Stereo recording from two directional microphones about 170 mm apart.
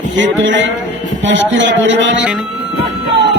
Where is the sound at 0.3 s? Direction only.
90° right.